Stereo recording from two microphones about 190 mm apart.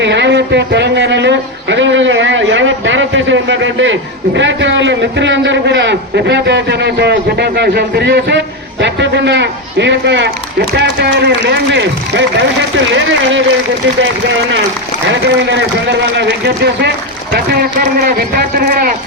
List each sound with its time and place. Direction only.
0.0 s a sound: 65° right (ahead or behind)
4.4 s a man's voice: 75° right (ahead or behind)
15.1 s a man's voice: 65° right (ahead or behind); by 18.9 s 50° right (ahead or behind)